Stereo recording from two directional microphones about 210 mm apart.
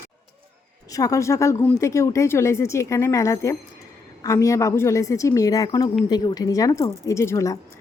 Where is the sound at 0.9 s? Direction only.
15° left (ahead or behind).